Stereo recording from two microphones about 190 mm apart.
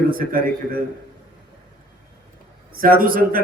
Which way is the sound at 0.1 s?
50° right (ahead or behind).